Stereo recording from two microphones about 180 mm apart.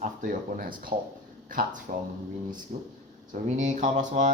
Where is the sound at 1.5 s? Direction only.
50° right (ahead or behind).